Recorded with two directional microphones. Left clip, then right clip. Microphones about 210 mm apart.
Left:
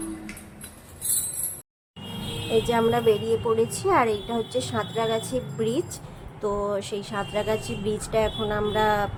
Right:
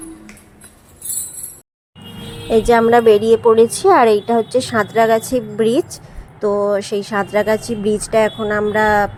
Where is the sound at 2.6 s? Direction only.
35° right (ahead or behind).